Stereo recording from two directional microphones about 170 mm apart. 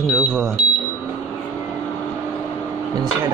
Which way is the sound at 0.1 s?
Centre (ahead or behind).